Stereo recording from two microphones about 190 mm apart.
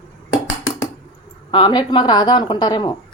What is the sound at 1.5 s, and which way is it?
Speech, 25° left (ahead or behind).